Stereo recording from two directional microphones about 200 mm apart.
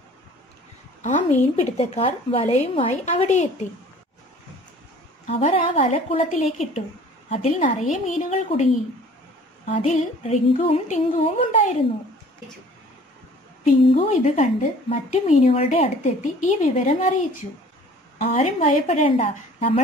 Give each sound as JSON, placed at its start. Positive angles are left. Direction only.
{"t": 1.0, "sound": "a woman's voice", "side_deg": 35}
{"t": 5.2, "sound": "a woman's voice", "side_deg": 30}
{"t": 9.7, "sound": "a woman's voice", "side_deg": 35}
{"t": 13.9, "sound": "a woman's voice", "side_deg": 40}
{"t": 18.2, "sound": "a woman's voice", "side_deg": 35}